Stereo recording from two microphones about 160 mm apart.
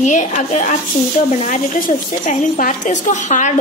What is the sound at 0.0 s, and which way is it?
A woman's voice, 50° left (ahead or behind).